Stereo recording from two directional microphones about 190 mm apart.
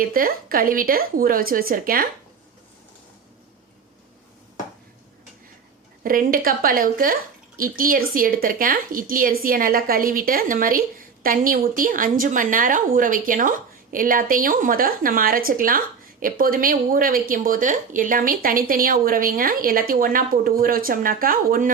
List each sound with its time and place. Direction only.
0.0 s speech: 50° right (ahead or behind)
6.0 s speech: 50° right (ahead or behind)